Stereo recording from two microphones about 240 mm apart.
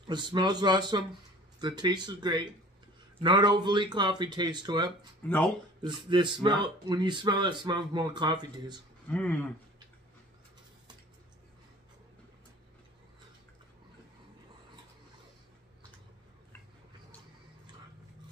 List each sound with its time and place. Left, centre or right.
0.0 s speech: centre
5.2 s speech: centre
5.8 s speech: centre
9.1 s speech: centre